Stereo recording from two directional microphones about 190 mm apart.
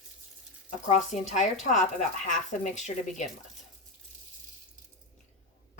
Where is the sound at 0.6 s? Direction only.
40° left (ahead or behind).